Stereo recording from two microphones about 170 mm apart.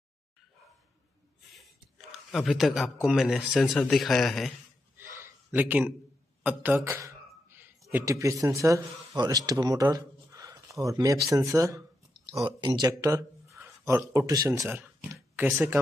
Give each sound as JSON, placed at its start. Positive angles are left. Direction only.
{"t": 1.5, "sound": "a man's voice", "side_deg": 0}
{"t": 4.9, "sound": "a sound", "side_deg": -10}
{"t": 6.4, "sound": "a man's voice", "side_deg": -10}